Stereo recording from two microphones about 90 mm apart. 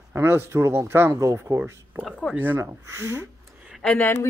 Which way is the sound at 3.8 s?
20° left (ahead or behind).